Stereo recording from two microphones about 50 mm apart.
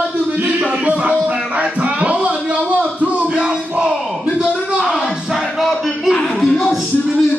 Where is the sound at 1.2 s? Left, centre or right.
Right.